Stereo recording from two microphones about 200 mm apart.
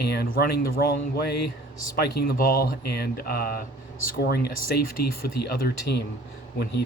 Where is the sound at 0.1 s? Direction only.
50° left (ahead or behind).